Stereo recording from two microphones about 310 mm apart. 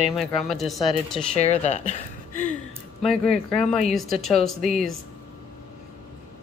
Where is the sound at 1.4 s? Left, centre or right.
Left.